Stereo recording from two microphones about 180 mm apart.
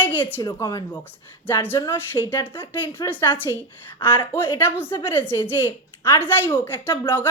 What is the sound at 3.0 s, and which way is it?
A woman's voice, 20° left (ahead or behind).